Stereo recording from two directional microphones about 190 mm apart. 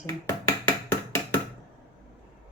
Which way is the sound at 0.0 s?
15° left (ahead or behind).